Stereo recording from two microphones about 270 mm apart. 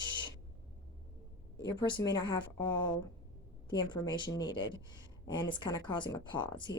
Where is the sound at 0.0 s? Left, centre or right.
Centre.